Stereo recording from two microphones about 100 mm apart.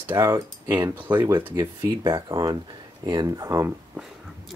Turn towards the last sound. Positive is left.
turn(degrees=-35)  # may be behind; listen again after turning